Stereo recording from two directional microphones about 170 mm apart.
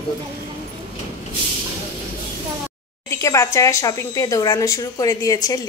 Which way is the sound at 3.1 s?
15° left (ahead or behind).